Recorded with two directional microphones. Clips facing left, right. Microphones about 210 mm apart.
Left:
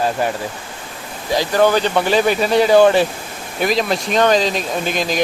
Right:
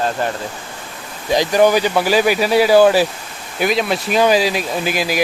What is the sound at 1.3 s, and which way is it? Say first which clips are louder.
Speech: right 2 dB; 15° right (ahead or behind).